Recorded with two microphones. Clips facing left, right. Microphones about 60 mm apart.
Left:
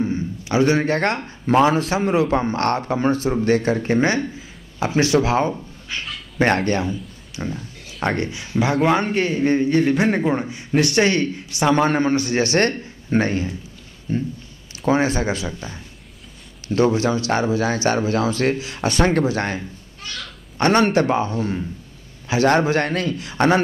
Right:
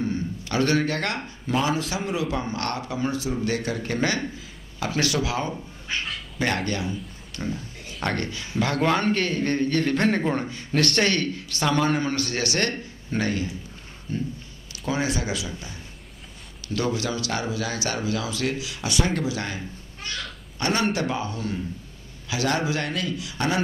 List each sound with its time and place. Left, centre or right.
0.0 s a sound: centre
0.8 s speech: left
6.9 s a sound: centre
7.5 s speech: centre
11.7 s speech: left
12.2 s speech: centre
12.4 s a man's voice: left
21.1 s a man's voice: left